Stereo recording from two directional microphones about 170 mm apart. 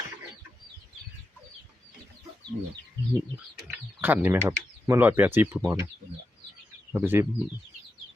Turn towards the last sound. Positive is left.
turn(degrees=-10)  # may be behind; listen again after turning